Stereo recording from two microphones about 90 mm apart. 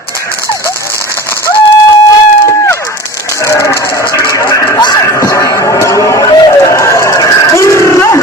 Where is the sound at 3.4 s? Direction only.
30° left (ahead or behind).